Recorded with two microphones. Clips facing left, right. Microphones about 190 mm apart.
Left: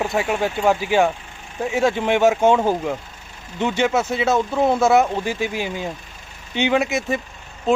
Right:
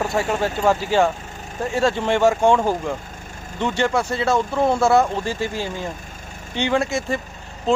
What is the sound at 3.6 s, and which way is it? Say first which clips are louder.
Speech: left 1 dB; 20° left (ahead or behind).